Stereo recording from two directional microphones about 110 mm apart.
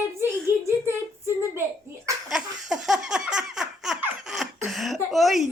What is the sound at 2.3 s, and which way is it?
Laughter, 5° right (ahead or behind).